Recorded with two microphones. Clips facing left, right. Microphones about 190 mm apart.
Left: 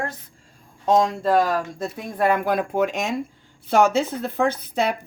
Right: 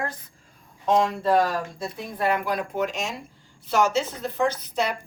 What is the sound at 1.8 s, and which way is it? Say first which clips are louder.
Speech: left 4 dB; 50° left (ahead or behind).